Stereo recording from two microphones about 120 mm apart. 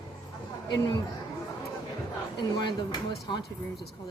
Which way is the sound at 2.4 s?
40° left (ahead or behind).